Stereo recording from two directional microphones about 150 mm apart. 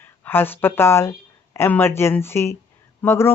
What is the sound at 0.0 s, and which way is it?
Speech, 15° left (ahead or behind).